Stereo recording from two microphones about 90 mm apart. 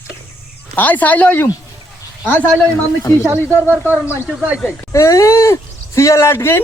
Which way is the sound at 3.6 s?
20° left (ahead or behind).